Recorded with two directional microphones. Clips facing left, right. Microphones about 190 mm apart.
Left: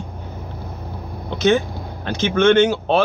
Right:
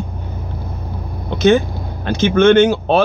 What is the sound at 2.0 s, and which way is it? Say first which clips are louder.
Speech: right 4 dB; 50° right (ahead or behind).